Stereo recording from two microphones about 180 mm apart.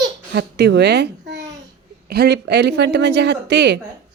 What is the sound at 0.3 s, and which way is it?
A child's voice, 70° right (ahead or behind).